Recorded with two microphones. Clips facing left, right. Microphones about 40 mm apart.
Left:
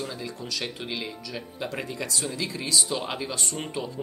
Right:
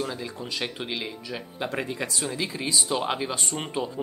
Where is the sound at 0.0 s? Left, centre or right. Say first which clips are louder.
Right 2 dB; centre.